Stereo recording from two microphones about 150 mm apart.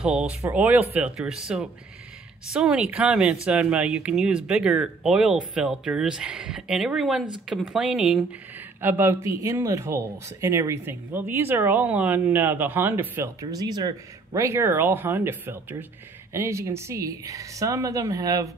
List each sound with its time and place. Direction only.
0.0 s speech: 5° right (ahead or behind)
8.8 s speech: 15° right (ahead or behind)